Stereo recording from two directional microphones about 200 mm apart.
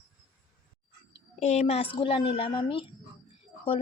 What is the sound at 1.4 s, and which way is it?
A woman's voice, 35° left (ahead or behind).